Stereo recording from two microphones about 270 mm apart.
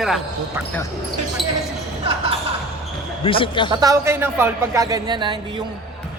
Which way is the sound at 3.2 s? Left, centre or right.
Centre.